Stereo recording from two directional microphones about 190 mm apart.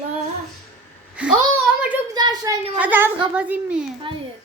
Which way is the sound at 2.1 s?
20° right (ahead or behind).